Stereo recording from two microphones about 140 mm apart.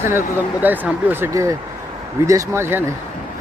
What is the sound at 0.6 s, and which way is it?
Speech, 15° right (ahead or behind).